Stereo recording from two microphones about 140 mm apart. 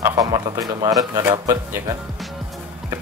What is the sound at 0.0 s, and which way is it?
Speech, 25° right (ahead or behind).